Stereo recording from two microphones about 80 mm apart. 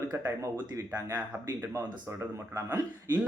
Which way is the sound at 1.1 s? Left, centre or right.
Right.